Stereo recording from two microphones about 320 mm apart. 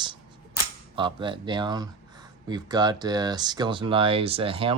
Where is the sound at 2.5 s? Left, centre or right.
Centre.